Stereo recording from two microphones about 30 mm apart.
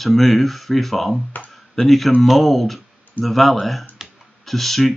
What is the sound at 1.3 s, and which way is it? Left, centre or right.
Speech, left.